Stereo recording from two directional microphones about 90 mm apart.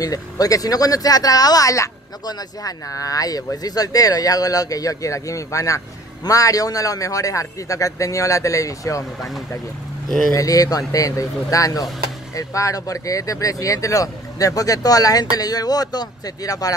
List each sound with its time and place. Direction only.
0.0 s speech: 40° left (ahead or behind)
10.0 s speech: 5° left (ahead or behind)
10.3 s speech: 40° left (ahead or behind)